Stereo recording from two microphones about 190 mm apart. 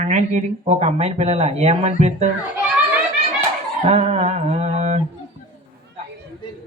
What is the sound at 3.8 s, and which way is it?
Dog, 35° right (ahead or behind).